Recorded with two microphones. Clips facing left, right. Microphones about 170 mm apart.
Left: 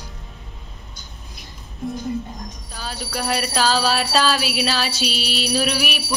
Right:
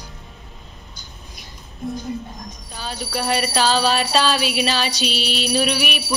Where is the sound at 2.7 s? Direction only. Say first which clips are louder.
Right 2 dB; centre (ahead or behind).